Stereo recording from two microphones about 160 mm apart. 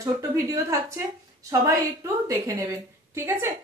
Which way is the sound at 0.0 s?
20° right (ahead or behind).